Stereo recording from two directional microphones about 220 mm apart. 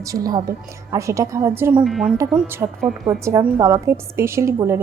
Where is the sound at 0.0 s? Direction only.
15° right (ahead or behind).